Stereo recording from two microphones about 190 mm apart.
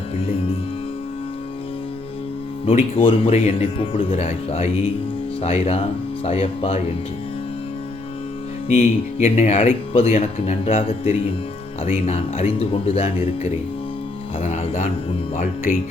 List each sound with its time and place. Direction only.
2.6 s speech: 30° left (ahead or behind)
8.7 s speech: 35° left (ahead or behind)